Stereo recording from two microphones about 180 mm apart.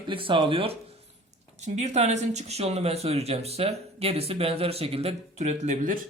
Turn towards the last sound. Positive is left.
turn(degrees=-45)  # may be behind; listen again after turning